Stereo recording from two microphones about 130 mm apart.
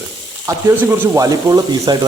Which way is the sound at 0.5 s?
25° right (ahead or behind).